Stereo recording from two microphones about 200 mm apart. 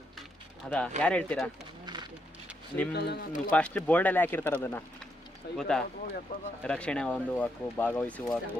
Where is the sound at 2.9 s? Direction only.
55° left (ahead or behind).